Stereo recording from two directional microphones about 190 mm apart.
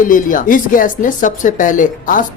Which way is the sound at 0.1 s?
45° left (ahead or behind).